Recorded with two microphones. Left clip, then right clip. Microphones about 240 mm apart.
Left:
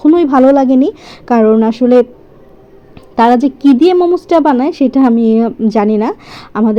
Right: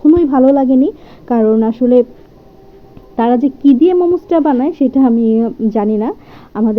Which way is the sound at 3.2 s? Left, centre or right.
Left.